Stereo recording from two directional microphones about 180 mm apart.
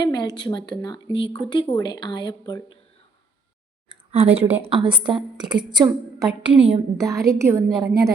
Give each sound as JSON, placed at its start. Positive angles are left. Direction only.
{"t": 0.0, "sound": "a woman's voice", "side_deg": 25}
{"t": 4.4, "sound": "a woman's voice", "side_deg": -35}
{"t": 6.9, "sound": "a woman's voice", "side_deg": -20}